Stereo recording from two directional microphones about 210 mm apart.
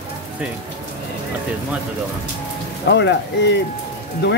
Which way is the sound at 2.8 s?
55° left (ahead or behind).